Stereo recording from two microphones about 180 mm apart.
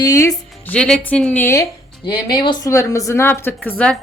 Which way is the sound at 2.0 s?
25° left (ahead or behind).